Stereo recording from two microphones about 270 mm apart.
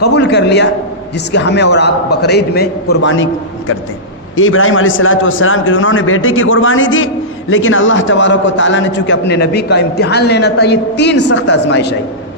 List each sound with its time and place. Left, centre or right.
0.0 s a man's voice: left
4.4 s a man's voice: left